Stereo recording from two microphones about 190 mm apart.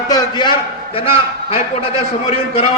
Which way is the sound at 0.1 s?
20° left (ahead or behind).